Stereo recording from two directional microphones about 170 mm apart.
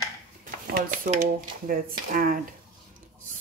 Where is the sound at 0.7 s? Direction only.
55° right (ahead or behind).